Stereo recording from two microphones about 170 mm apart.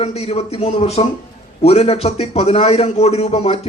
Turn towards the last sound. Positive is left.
turn(degrees=35)  # may be behind; listen again after turning